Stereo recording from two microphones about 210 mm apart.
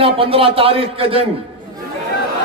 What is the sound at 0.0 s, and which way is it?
A man's voice, 25° right (ahead or behind).